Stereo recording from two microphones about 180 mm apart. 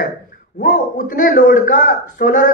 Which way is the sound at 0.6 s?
50° left (ahead or behind).